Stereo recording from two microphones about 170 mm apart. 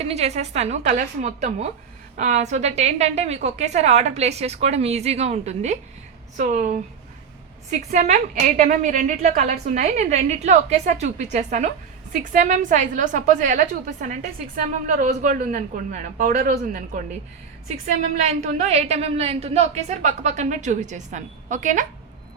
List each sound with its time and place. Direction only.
0.0 s a woman's voice: 40° right (ahead or behind)
7.9 s a woman's voice: 50° right (ahead or behind)
18.2 s a woman's voice: 40° right (ahead or behind)